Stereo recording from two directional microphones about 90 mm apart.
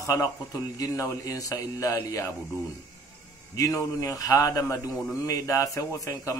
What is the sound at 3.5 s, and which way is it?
A man's voice, 40° left (ahead or behind).